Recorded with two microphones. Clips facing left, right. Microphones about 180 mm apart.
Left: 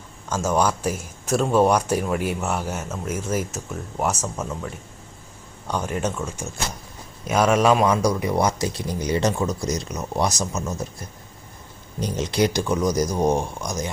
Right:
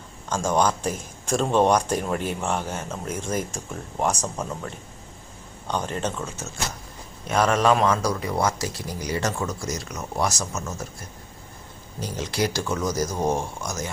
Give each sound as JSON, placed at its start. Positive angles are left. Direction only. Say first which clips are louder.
{"t": 0.3, "sound": "speech", "louder": "left 1 dB", "side_deg": 5}
{"t": 5.6, "sound": "speech", "louder": "left 2 dB", "side_deg": 10}
{"t": 11.9, "sound": "speech", "louder": "left 5 dB", "side_deg": 20}